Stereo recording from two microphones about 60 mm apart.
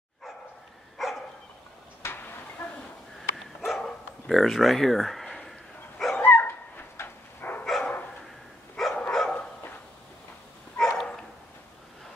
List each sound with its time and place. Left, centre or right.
0.9 s dog: centre
2.0 s a sound: left
3.2 s dog: centre
6.2 s dog: left
7.6 s dog: centre
10.8 s dog: centre